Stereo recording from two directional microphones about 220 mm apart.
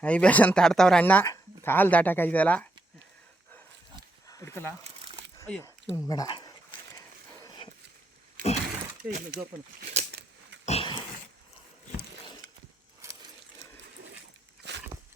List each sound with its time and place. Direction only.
0.0 s speech: 5° left (ahead or behind)
4.3 s speech: 15° left (ahead or behind)
6.1 s dog: 20° left (ahead or behind)
9.0 s speech: 40° right (ahead or behind)
10.7 s dog: 25° left (ahead or behind)
13.0 s a sound: 15° right (ahead or behind)
14.6 s a sound: 50° right (ahead or behind)